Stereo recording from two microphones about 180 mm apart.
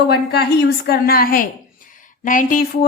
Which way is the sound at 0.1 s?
60° left (ahead or behind).